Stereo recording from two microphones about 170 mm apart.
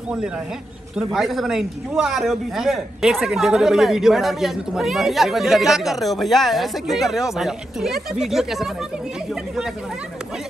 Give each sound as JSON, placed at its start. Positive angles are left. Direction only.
{"t": 0.9, "sound": "a man's voice", "side_deg": 0}